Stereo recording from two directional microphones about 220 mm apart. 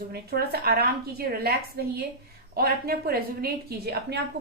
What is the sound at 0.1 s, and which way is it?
A woman's voice, 45° right (ahead or behind).